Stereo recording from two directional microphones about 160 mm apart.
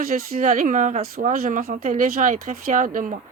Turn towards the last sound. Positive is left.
turn(degrees=-55)  # may be behind; listen again after turning